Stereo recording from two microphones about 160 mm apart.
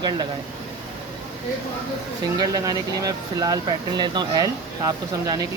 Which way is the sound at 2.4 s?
20° right (ahead or behind).